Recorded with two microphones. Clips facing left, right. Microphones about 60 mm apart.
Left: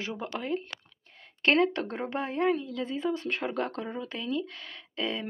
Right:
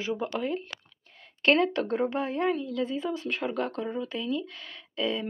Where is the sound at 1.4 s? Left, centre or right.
Left.